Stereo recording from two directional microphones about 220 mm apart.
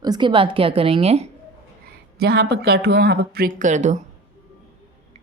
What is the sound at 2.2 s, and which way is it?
Speech, 45° right (ahead or behind).